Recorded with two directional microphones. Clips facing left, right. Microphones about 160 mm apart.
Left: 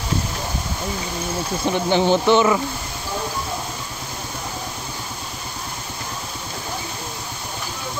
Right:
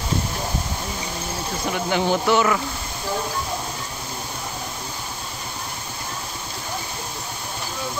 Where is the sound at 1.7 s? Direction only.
30° left (ahead or behind).